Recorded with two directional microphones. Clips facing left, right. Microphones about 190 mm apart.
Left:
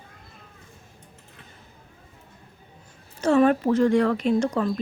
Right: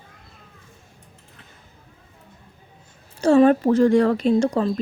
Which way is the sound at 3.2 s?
30° right (ahead or behind).